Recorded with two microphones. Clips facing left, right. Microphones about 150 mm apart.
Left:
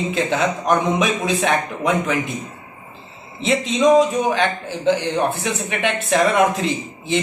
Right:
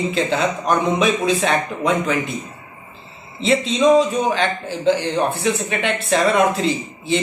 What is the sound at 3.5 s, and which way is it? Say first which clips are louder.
A man's voice: even; 15° left (ahead or behind).